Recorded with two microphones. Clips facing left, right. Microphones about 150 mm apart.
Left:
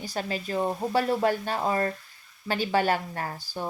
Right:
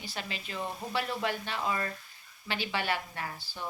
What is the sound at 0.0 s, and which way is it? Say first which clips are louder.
Speech: left 9 dB; 40° left (ahead or behind).